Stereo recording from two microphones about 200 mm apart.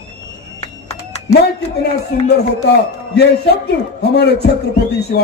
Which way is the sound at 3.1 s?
55° left (ahead or behind).